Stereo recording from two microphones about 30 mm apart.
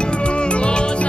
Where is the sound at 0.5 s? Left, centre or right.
Left.